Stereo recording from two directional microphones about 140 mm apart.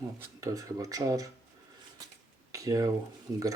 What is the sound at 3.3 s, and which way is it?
Speech, 25° right (ahead or behind).